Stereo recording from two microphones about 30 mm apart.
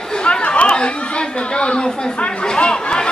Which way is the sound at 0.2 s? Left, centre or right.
Left.